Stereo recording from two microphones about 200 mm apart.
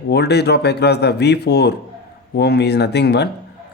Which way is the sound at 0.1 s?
55° left (ahead or behind).